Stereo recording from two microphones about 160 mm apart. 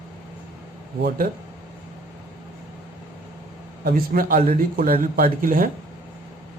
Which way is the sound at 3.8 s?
65° right (ahead or behind).